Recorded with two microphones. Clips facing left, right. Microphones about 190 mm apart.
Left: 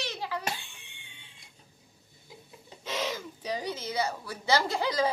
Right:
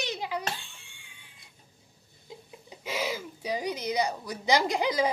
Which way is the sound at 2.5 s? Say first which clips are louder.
Right 1 dB; 10° right (ahead or behind).